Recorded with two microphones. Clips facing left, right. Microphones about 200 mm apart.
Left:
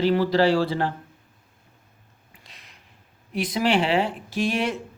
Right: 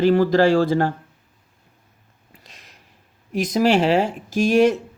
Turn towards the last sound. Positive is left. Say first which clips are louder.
# right 9 dB
turn(degrees=-45)  # may be behind; listen again after turning